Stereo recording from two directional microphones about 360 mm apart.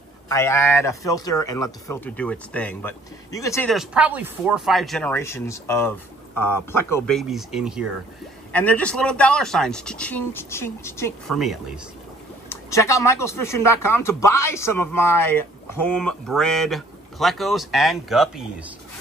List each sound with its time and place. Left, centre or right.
0.3 s speech: centre